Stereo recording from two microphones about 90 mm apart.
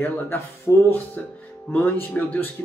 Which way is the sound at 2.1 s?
20° left (ahead or behind).